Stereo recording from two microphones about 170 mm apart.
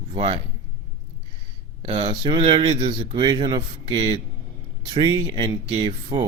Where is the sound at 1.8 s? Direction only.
35° right (ahead or behind).